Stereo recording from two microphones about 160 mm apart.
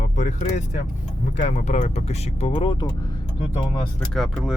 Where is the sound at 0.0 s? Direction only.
45° left (ahead or behind).